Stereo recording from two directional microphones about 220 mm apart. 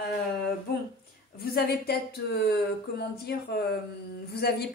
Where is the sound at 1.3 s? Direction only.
45° left (ahead or behind).